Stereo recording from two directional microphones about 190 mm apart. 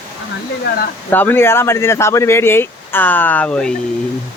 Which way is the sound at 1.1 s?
10° left (ahead or behind).